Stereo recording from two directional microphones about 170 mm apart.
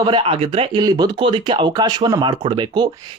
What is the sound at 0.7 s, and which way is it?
Speech, 25° right (ahead or behind).